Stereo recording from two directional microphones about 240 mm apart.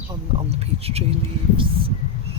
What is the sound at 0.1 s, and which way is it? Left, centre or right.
Speech, right.